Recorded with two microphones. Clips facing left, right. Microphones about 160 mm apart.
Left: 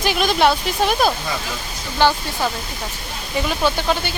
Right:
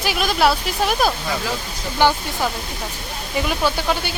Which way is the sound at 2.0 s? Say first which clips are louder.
Even; 15° right (ahead or behind).